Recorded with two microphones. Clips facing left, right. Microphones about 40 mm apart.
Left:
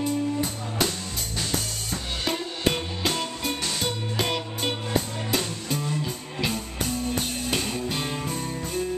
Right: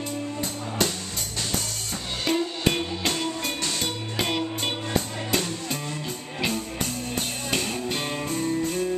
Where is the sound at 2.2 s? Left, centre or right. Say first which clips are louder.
Right 3 dB; centre.